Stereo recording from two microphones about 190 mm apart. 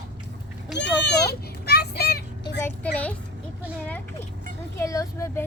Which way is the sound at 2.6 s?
10° left (ahead or behind).